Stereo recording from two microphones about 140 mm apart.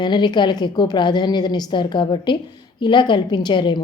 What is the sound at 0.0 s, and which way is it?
Speech, 30° left (ahead or behind).